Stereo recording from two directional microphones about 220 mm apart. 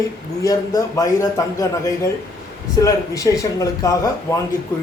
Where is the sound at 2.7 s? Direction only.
15° left (ahead or behind).